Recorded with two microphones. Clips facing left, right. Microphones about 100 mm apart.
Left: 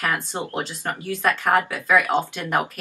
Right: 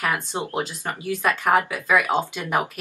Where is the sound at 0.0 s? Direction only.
15° right (ahead or behind).